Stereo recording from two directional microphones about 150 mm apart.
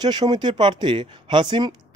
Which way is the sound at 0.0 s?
25° right (ahead or behind).